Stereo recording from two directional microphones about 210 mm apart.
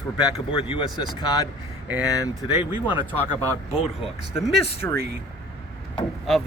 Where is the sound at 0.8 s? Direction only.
20° left (ahead or behind).